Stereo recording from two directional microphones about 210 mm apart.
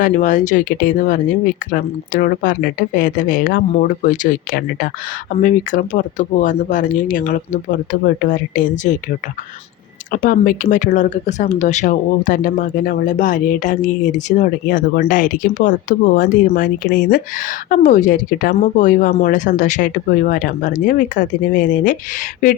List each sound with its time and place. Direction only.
0.0 s speech: 35° left (ahead or behind)
10.1 s speech: 40° left (ahead or behind)